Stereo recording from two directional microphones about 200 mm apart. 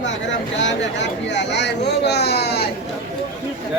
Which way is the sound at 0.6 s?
60° left (ahead or behind).